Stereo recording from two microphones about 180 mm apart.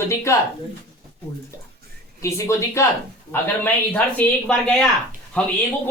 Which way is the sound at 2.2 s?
15° left (ahead or behind).